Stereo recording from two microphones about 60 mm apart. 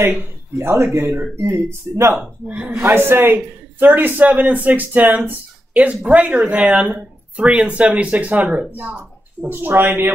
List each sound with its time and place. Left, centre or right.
0.0 s speech: right
2.4 s speech: right
2.7 s speech: right